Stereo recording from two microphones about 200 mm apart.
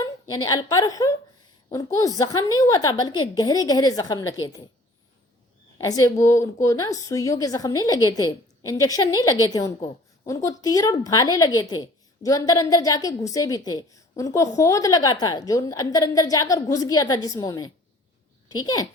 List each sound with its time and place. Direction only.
0.0 s a woman's voice: 20° left (ahead or behind)
5.7 s a woman's voice: 15° left (ahead or behind)